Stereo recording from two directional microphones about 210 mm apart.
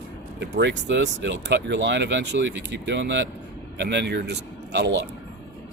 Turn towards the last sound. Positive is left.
turn(degrees=-55)  # may be behind; listen again after turning